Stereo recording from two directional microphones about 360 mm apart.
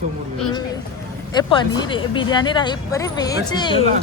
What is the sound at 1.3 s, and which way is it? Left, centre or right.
Speech, centre.